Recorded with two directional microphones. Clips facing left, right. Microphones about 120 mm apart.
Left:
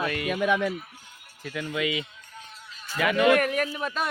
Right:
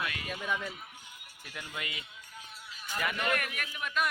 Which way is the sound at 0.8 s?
15° right (ahead or behind).